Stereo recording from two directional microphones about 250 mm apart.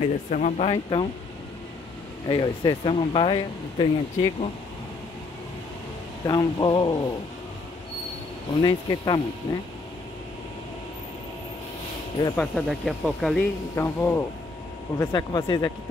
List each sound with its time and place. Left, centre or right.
0.3 s speech: left
2.2 s speech: centre
6.2 s speech: centre
8.5 s speech: centre
12.4 s speech: centre